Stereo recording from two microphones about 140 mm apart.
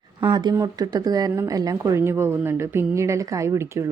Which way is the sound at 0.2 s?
30° right (ahead or behind).